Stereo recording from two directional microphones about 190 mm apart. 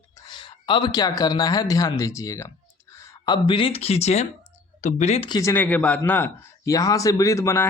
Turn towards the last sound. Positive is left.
turn(degrees=15)  # may be behind; listen again after turning